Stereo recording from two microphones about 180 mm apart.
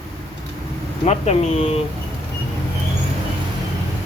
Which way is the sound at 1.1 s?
35° left (ahead or behind).